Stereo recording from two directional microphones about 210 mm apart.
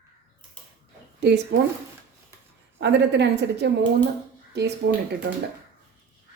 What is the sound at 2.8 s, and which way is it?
Speech, 55° right (ahead or behind).